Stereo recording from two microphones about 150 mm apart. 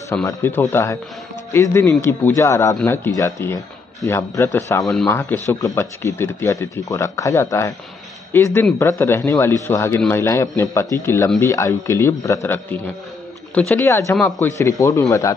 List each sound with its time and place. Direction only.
0.2 s a man's voice: 20° left (ahead or behind)